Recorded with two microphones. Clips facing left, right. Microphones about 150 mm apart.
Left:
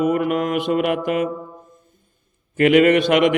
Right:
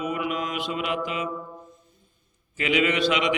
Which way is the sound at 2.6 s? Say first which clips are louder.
Left 10 dB; 55° left (ahead or behind).